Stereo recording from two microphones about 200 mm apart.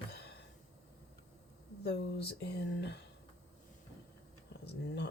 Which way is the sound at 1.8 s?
55° left (ahead or behind).